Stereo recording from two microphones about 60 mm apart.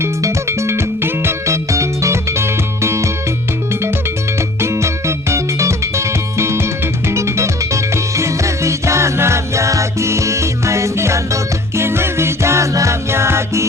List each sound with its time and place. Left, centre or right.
0.0 s music: right
1.7 s music: right
4.6 s music: right